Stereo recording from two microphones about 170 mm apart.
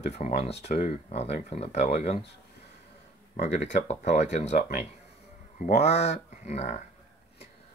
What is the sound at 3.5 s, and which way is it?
Speech, 40° left (ahead or behind).